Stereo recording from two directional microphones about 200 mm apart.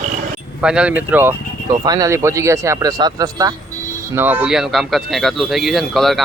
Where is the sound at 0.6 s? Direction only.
5° right (ahead or behind).